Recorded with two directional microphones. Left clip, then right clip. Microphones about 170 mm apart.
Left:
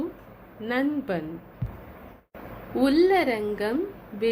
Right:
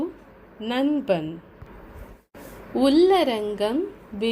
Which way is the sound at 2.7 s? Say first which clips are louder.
Right 3 dB; 40° right (ahead or behind).